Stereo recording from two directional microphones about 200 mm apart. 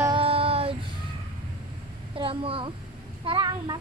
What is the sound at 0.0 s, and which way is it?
Child singing, 25° right (ahead or behind).